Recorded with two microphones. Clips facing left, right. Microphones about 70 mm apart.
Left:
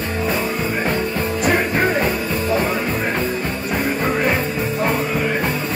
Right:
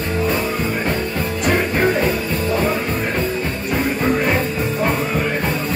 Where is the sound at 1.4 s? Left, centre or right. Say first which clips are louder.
Even; centre.